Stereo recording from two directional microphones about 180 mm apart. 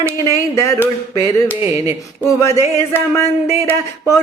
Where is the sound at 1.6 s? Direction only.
15° right (ahead or behind).